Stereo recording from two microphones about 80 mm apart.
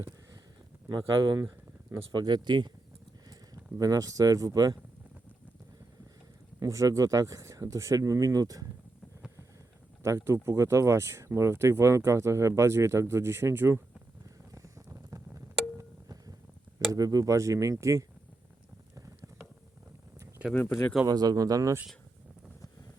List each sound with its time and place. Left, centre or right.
0.9 s speech: right
1.4 s a sound: right
2.1 s speech: right
3.2 s speech: right
6.6 s speech: right
10.0 s speech: right
14.5 s a sound: right
15.8 s a sound: right
16.9 s speech: right
18.9 s a sound: right
20.5 s speech: centre
21.1 s speech: right